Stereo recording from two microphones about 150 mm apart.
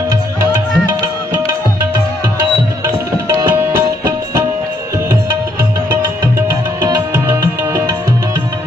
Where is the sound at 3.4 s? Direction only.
15° right (ahead or behind).